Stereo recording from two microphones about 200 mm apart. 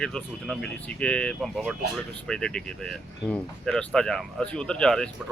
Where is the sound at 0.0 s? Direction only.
5° left (ahead or behind).